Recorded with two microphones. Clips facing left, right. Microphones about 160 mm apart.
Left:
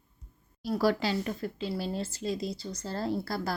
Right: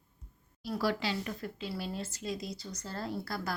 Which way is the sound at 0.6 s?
40° left (ahead or behind).